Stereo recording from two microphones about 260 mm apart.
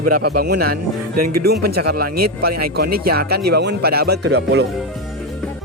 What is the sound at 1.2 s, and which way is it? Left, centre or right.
Speech, right.